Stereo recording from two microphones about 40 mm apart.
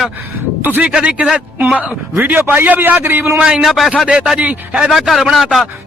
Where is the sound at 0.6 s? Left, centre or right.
Right.